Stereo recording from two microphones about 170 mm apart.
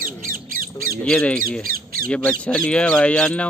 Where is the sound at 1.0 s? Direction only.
5° left (ahead or behind).